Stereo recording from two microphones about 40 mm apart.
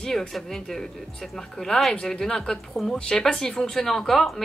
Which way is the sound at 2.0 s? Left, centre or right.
Centre.